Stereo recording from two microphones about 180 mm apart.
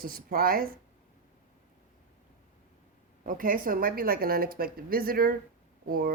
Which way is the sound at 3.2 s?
50° right (ahead or behind).